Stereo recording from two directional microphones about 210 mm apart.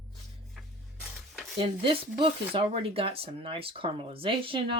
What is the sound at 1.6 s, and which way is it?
Speech, 25° right (ahead or behind).